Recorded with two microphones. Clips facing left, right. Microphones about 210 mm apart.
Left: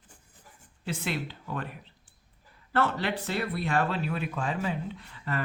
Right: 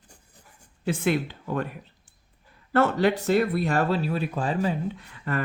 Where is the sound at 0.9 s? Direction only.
50° right (ahead or behind).